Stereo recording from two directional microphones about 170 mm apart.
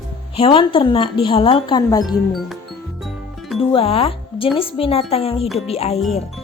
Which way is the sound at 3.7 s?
35° left (ahead or behind).